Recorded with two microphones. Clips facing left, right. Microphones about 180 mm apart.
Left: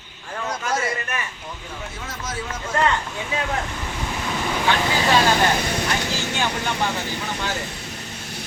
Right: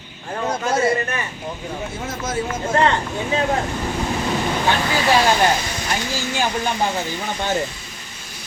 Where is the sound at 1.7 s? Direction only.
30° right (ahead or behind).